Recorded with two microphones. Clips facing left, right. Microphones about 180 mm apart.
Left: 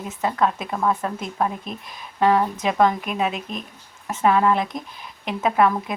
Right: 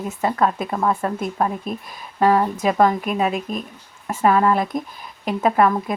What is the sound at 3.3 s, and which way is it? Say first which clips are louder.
Speech: right 5 dB; 45° right (ahead or behind).